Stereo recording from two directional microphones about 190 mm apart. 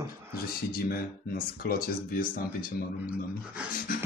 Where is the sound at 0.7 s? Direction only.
50° left (ahead or behind).